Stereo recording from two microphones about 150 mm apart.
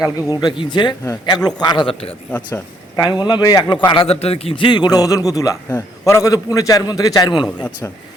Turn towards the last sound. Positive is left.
turn(degrees=30)  # may be behind; listen again after turning